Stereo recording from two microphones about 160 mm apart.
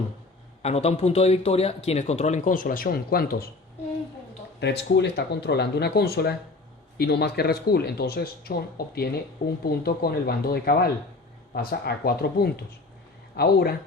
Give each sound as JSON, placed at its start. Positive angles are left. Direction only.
{"t": 0.6, "sound": "speech", "side_deg": 40}
{"t": 4.6, "sound": "speech", "side_deg": 90}
{"t": 9.6, "sound": "speech", "side_deg": 75}